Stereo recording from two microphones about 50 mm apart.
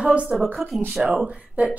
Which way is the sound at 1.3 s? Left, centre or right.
Right.